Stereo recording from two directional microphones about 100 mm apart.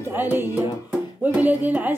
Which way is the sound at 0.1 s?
20° right (ahead or behind).